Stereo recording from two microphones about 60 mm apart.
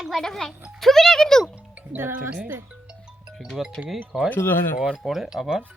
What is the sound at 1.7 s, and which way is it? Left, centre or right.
Music, right.